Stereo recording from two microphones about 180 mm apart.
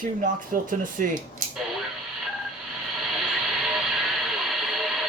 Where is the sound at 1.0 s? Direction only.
50° right (ahead or behind).